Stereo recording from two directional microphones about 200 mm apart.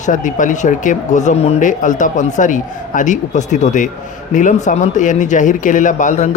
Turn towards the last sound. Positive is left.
turn(degrees=35)  # may be behind; listen again after turning